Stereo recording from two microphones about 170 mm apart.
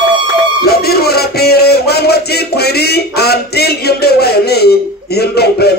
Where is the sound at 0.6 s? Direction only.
65° left (ahead or behind).